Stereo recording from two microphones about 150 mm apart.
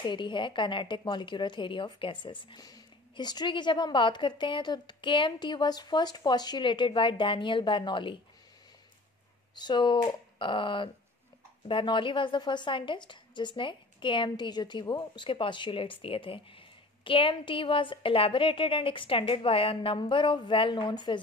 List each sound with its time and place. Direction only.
0.0 s a woman's voice: 30° left (ahead or behind)
9.6 s a woman's voice: 30° left (ahead or behind)